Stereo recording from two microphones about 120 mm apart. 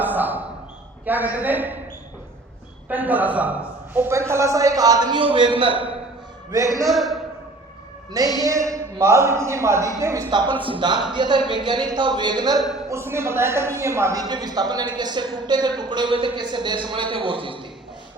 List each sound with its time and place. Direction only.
0.0 s a sound: 15° right (ahead or behind)
1.0 s a woman's voice: 15° right (ahead or behind)
2.9 s a man's voice: 15° right (ahead or behind); by 5.8 s 45° right (ahead or behind)
6.9 s a man's voice: centre (ahead or behind)
8.1 s a man's voice: 30° right (ahead or behind)
12.9 s a man's voice: 20° right (ahead or behind); by 17.6 s 45° right (ahead or behind)